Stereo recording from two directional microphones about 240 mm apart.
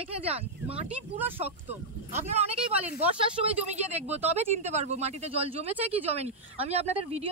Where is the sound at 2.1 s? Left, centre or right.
Right.